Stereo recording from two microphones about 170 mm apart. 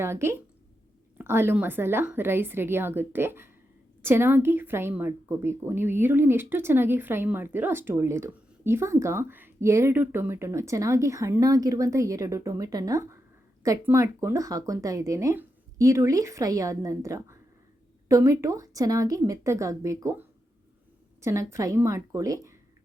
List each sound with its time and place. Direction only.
0.0 s a woman's voice: 15° right (ahead or behind)